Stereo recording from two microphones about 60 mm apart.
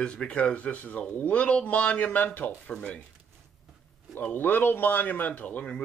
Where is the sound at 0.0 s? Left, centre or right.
Centre.